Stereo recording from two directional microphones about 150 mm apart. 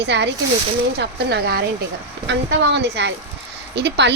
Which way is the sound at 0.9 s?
90° right.